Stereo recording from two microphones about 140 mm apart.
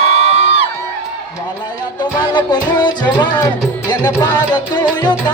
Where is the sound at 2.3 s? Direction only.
30° left (ahead or behind).